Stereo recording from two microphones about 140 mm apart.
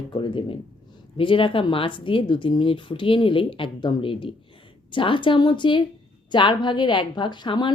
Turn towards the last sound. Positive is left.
turn(degrees=35)  # may be behind; listen again after turning